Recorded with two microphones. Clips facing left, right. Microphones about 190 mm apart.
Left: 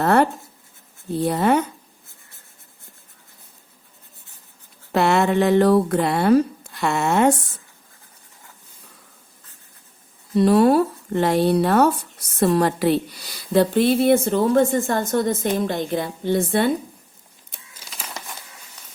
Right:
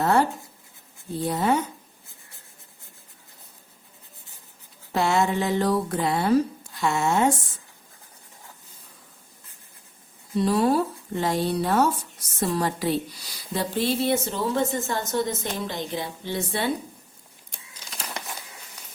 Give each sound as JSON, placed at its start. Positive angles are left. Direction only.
{"t": 0.0, "sound": "speech", "side_deg": 65}
{"t": 4.9, "sound": "speech", "side_deg": 65}
{"t": 10.3, "sound": "a woman's voice", "side_deg": 65}
{"t": 17.5, "sound": "crumpling", "side_deg": 5}